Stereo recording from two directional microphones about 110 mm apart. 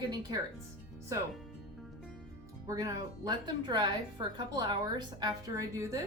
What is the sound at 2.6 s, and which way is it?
Speech, 30° right (ahead or behind).